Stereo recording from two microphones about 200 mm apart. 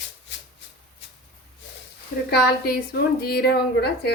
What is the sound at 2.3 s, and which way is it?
A woman's voice, 50° left (ahead or behind).